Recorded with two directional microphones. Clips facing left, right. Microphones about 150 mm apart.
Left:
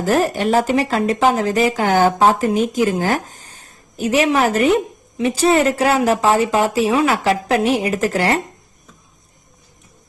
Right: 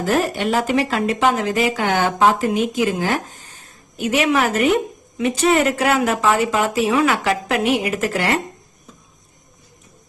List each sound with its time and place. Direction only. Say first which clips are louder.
0.0 s speech: left 2 dB; 40° left (ahead or behind)